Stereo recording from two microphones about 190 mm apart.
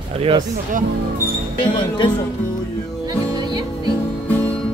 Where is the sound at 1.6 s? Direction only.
25° left (ahead or behind).